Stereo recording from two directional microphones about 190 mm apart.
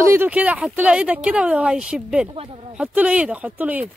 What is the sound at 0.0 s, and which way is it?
Speech, 10° right (ahead or behind).